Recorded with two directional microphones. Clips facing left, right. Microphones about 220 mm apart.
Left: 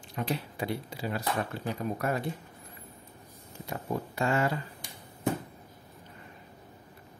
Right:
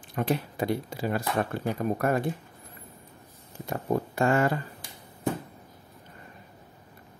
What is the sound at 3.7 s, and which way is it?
Speech, 50° right (ahead or behind).